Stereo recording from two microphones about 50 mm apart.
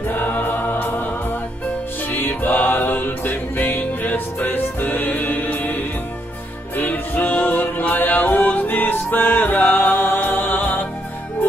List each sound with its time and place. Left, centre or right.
0.1 s choir: left
2.1 s music: left